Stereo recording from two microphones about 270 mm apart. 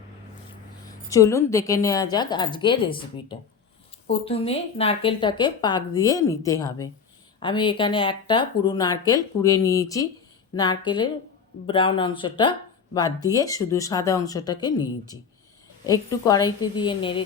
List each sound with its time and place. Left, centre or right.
1.1 s speech: centre